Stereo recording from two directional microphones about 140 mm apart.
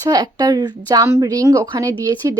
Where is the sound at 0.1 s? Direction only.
30° right (ahead or behind).